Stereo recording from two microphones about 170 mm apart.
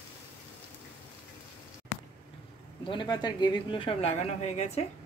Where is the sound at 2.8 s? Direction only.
30° left (ahead or behind).